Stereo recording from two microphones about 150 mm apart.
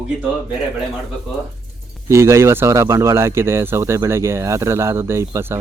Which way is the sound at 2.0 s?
20° right (ahead or behind).